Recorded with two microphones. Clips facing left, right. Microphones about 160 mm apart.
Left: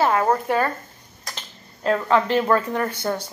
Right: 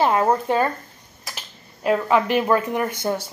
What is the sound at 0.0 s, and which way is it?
A woman's voice, 20° right (ahead or behind).